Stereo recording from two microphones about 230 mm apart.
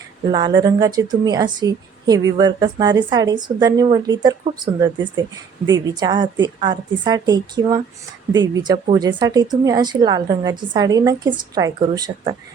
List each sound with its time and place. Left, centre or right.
0.3 s a woman's voice: centre